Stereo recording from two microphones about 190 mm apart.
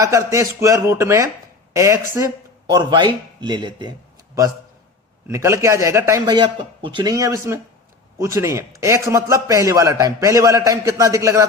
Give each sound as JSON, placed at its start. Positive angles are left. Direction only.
{"t": 0.0, "sound": "a man's voice", "side_deg": -15}
{"t": 5.3, "sound": "a man's voice", "side_deg": -15}